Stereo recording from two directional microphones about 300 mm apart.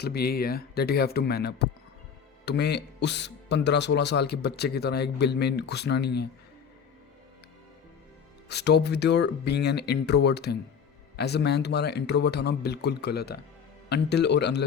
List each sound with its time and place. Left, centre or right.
0.0 s speech: left
8.4 s speech: left